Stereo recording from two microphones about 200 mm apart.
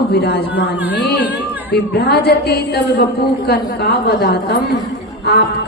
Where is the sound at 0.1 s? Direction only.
55° left (ahead or behind).